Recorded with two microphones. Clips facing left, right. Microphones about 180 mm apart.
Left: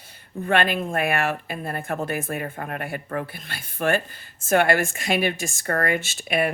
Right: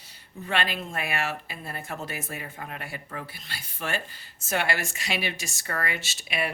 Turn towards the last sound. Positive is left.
turn(degrees=50)  # may be behind; listen again after turning